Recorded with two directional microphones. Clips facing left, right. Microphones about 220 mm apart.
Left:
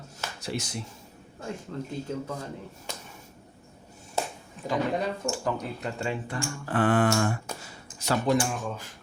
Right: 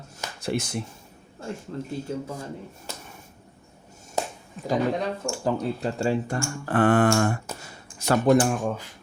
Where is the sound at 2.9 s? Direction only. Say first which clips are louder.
Even; 5° right (ahead or behind).